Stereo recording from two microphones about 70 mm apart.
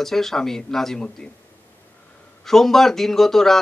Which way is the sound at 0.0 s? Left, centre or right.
Centre.